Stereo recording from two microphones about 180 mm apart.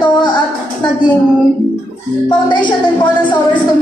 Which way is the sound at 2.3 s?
25° left (ahead or behind).